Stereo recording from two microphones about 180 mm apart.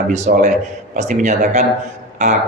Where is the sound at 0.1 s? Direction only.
40° right (ahead or behind).